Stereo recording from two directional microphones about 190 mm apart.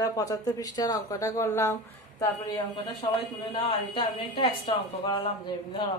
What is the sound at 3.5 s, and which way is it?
Speech, 30° left (ahead or behind).